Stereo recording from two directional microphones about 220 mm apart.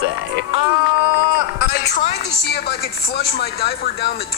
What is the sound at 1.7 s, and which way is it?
Speech, 45° left (ahead or behind).